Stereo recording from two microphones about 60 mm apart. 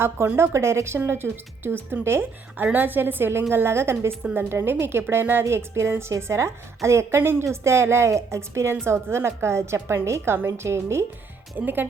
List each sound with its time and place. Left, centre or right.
0.3 s a woman's voice: right
7.2 s a woman's voice: right
11.5 s a woman's voice: right